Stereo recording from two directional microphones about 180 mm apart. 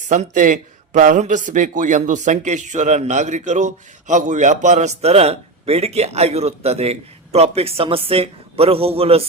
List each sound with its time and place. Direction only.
0.1 s a man's voice: 45° right (ahead or behind)